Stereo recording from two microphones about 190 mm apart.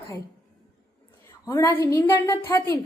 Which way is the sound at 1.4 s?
15° left (ahead or behind).